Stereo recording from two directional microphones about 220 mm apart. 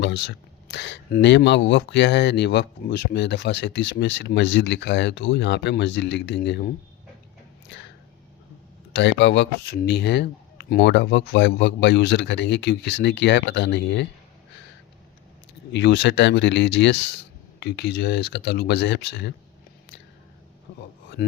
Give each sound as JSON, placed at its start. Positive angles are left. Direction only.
{"t": 0.0, "sound": "speech", "side_deg": 55}
{"t": 9.0, "sound": "speech", "side_deg": 55}
{"t": 15.7, "sound": "speech", "side_deg": 50}